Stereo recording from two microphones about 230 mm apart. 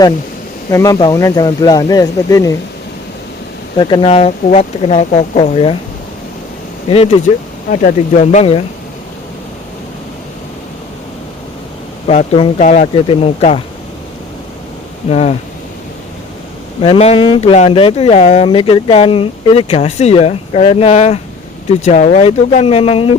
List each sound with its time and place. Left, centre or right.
0.7 s speech: centre
3.8 s speech: centre
6.8 s speech: left
12.0 s speech: left
15.1 s speech: left
16.8 s speech: left